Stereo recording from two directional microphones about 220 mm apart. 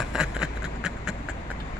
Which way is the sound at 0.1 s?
5° right (ahead or behind).